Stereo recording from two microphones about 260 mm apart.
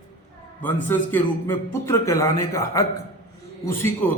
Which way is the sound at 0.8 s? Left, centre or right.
Centre.